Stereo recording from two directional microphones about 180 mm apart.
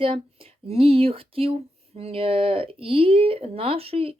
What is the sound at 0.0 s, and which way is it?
Speech, 30° right (ahead or behind).